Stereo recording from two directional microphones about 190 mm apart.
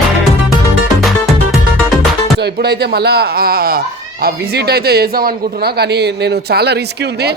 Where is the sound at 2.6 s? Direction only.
60° right (ahead or behind).